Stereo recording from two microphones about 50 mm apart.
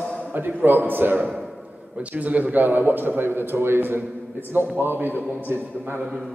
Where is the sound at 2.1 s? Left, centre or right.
Right.